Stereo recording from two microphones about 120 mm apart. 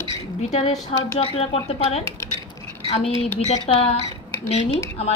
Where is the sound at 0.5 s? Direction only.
60° left (ahead or behind).